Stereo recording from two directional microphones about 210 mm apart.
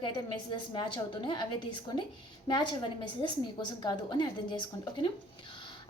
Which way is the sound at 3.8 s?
20° left (ahead or behind).